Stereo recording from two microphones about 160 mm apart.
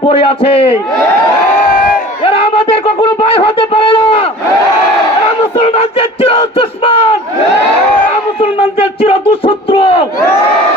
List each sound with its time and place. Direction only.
0.1 s a man's voice: 35° left (ahead or behind)
2.2 s wind instrument: 35° left (ahead or behind)
5.6 s crowd: 35° left (ahead or behind)
8.4 s a sound: 35° left (ahead or behind)